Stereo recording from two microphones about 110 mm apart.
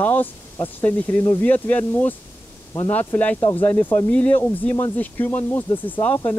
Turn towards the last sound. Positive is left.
turn(degrees=15)  # may be behind; listen again after turning